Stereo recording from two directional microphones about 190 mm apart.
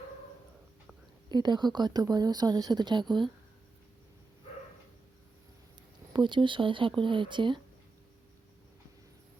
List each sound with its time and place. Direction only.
1.3 s speech: 20° right (ahead or behind)
6.1 s speech: 25° right (ahead or behind)